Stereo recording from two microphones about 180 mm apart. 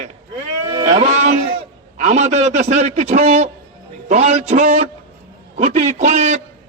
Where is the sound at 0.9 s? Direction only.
40° right (ahead or behind).